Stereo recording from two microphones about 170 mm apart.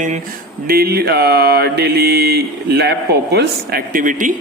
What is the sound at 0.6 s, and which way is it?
Mantra, 65° right (ahead or behind).